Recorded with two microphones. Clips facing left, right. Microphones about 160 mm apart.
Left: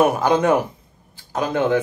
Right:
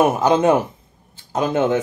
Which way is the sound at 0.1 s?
25° right (ahead or behind).